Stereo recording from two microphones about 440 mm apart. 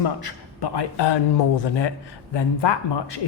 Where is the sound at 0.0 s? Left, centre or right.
Left.